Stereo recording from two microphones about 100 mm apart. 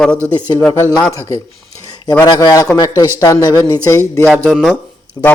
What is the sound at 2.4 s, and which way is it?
Speech, 35° left (ahead or behind).